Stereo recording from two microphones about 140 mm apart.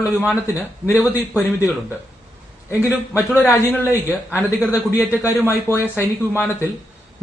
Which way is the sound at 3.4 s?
15° left (ahead or behind).